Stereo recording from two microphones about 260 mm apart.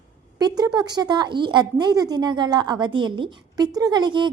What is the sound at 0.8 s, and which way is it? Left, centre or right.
A woman's voice, centre.